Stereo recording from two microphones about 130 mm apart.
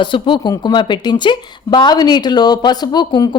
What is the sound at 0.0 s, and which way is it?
Speech, 40° left (ahead or behind).